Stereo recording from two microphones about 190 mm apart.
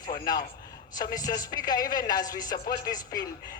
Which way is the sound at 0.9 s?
20° left (ahead or behind).